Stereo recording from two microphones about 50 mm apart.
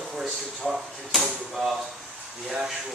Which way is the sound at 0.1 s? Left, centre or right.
Centre.